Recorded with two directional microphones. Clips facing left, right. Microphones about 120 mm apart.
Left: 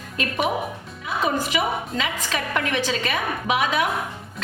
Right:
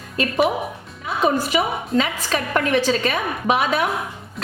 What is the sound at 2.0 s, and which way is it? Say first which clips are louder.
A woman's voice: right 5 dB; 40° right (ahead or behind).